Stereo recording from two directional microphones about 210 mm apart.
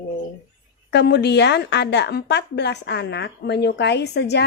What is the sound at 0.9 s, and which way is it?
A woman's voice, 55° left (ahead or behind).